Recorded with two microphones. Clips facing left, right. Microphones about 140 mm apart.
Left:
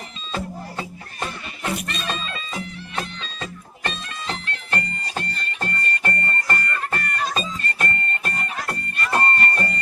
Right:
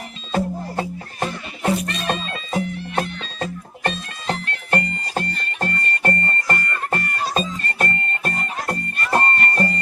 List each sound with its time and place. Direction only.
0.3 s music: 50° right (ahead or behind)